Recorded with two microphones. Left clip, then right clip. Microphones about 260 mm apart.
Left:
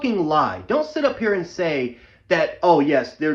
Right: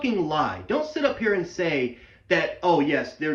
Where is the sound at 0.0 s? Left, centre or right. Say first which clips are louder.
Left 5 dB; centre.